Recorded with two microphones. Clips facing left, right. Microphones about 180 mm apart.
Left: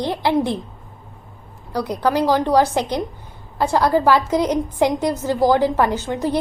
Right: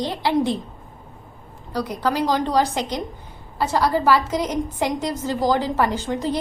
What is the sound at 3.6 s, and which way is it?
A woman's voice, 10° left (ahead or behind).